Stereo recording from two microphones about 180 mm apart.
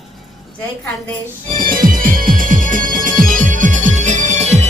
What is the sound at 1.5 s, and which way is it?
Music, 50° right (ahead or behind).